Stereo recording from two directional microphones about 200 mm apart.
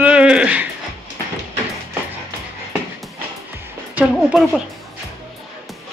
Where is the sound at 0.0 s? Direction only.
5° right (ahead or behind).